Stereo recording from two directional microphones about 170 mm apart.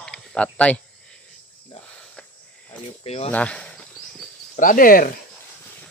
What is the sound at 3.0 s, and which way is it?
Speech, 35° left (ahead or behind).